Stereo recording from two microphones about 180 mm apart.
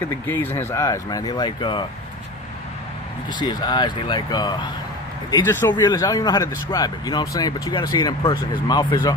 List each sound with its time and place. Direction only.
0.3 s speech: 10° left (ahead or behind)
3.3 s speech: 25° left (ahead or behind)
5.3 s speech: 15° left (ahead or behind)